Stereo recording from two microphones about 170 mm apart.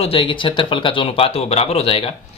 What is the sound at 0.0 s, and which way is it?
Speech, 30° left (ahead or behind).